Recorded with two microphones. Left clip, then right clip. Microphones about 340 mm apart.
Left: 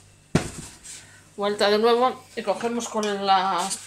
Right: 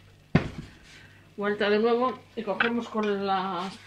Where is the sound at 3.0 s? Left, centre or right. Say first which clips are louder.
Left 7 dB; left.